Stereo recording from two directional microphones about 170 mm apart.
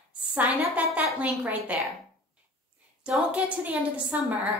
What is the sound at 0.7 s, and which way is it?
A woman's voice, 10° right (ahead or behind).